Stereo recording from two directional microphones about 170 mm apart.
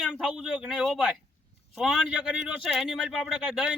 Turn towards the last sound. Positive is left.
turn(degrees=-5)  # may be behind; listen again after turning